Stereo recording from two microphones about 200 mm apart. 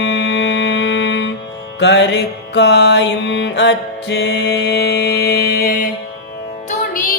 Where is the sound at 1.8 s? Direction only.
60° left (ahead or behind).